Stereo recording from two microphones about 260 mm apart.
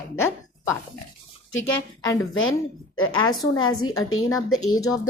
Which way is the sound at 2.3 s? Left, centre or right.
Left.